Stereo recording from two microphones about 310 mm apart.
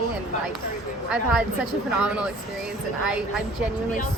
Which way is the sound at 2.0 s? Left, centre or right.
Centre.